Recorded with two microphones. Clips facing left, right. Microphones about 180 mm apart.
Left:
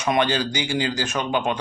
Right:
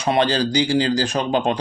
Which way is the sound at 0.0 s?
35° right (ahead or behind).